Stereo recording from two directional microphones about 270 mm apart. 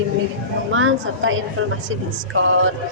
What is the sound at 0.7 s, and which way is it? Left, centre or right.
A woman's voice, right.